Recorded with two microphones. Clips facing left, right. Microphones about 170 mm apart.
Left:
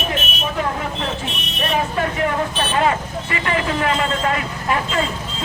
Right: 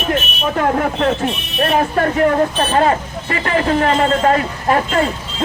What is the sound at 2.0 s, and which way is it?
Speech, 45° right (ahead or behind).